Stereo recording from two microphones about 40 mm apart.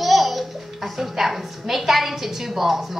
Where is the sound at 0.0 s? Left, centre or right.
Centre.